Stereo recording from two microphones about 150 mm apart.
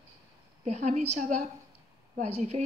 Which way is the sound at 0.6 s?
50° right (ahead or behind).